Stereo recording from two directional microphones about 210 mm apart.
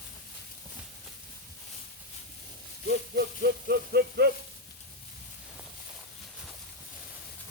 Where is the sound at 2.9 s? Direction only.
50° right (ahead or behind).